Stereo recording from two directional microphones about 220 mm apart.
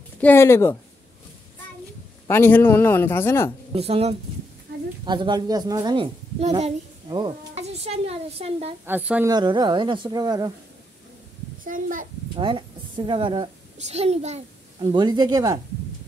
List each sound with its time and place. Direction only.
0.2 s a man's voice: 10° left (ahead or behind)
2.2 s a man's voice: 10° left (ahead or behind)
3.7 s a woman's voice: 25° right (ahead or behind)
8.8 s a woman's voice: 5° right (ahead or behind)
9.3 s a woman's voice: 20° right (ahead or behind)
11.6 s a child's voice: 40° right (ahead or behind)
12.4 s a child's voice: 20° right (ahead or behind)